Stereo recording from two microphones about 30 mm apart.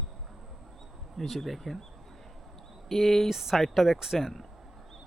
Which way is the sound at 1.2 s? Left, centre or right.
Centre.